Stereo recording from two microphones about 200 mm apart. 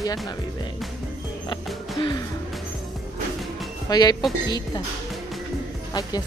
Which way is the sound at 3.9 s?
20° left (ahead or behind).